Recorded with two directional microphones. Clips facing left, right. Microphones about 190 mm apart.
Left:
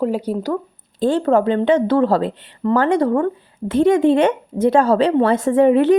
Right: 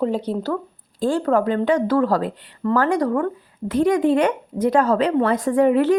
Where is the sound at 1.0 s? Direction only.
25° left (ahead or behind).